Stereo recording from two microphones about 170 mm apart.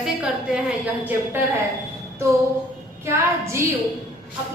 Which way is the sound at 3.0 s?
15° right (ahead or behind).